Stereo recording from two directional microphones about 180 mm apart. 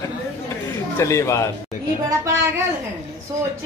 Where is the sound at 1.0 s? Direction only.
15° left (ahead or behind).